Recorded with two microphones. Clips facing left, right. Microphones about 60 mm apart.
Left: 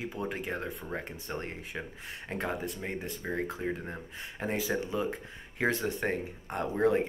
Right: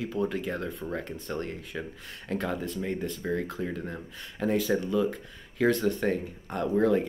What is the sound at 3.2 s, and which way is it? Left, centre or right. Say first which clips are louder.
Speech: right 5 dB; centre.